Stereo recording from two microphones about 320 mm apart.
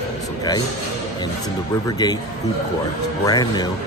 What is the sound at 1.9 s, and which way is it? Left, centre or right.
Speech, centre.